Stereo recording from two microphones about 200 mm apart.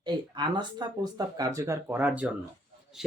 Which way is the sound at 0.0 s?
20° right (ahead or behind).